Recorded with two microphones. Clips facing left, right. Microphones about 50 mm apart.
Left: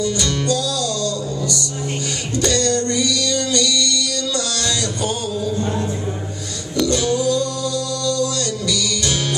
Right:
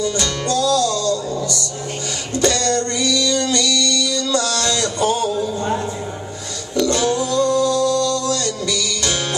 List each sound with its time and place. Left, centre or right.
0.0 s music: right
6.9 s music: right